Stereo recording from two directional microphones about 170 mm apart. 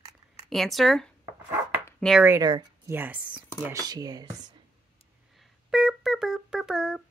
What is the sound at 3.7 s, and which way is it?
Speech, 20° right (ahead or behind).